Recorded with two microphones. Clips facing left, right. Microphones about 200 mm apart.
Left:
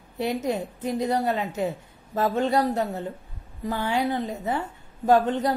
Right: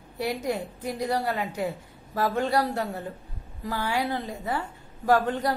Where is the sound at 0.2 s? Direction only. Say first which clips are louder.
Left 2 dB; 20° left (ahead or behind).